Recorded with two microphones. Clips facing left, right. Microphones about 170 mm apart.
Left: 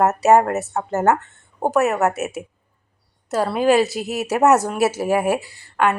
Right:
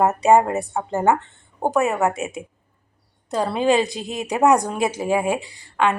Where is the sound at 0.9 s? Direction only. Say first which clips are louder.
Left 1 dB; 15° right (ahead or behind).